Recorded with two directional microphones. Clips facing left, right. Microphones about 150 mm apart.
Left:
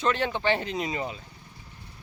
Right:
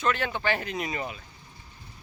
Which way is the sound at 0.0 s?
30° left (ahead or behind).